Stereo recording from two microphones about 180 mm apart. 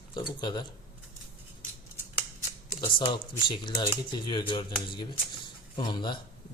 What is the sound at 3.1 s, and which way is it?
Speech, 25° left (ahead or behind).